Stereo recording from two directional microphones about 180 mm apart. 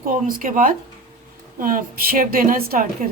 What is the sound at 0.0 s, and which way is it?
A woman's voice, 50° right (ahead or behind).